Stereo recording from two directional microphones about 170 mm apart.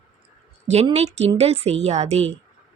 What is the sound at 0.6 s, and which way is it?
A woman's voice, 40° right (ahead or behind).